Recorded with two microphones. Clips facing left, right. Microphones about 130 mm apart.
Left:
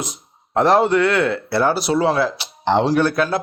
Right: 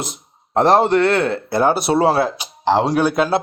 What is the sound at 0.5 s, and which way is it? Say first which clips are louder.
A man's voice: right 1 dB; 25° right (ahead or behind).